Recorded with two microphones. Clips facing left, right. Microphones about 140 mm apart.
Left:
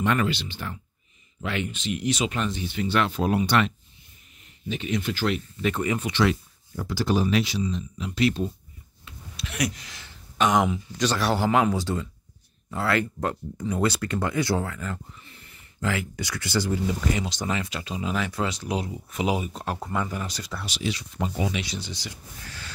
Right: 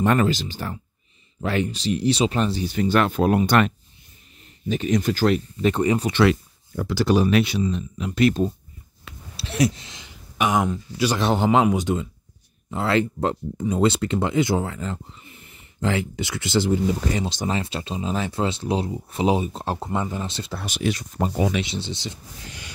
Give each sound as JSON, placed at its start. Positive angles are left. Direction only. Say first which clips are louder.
{"t": 0.0, "sound": "speech", "louder": "right 5 dB", "side_deg": -40}
{"t": 6.8, "sound": "speech", "louder": "right 5 dB", "side_deg": -80}
{"t": 9.1, "sound": "a sound", "louder": "right 3 dB", "side_deg": -75}
{"t": 9.4, "sound": "speech", "louder": "right 7 dB", "side_deg": -30}
{"t": 11.1, "sound": "speech", "louder": "right 3 dB", "side_deg": -20}
{"t": 20.6, "sound": "speech", "louder": "right 6 dB", "side_deg": -50}
{"t": 21.6, "sound": "speech", "louder": "right 5 dB", "side_deg": -25}